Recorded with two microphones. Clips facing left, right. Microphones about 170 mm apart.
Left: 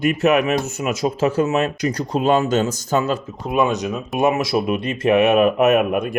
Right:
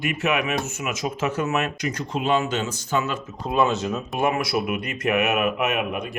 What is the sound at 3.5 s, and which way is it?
Speech, 15° left (ahead or behind).